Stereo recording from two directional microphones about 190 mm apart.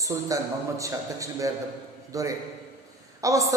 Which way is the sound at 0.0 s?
15° right (ahead or behind).